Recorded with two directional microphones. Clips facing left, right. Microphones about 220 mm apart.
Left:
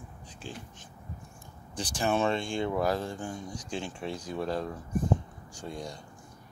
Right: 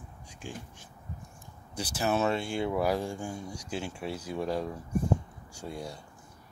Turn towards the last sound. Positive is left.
turn(degrees=-10)  # may be behind; listen again after turning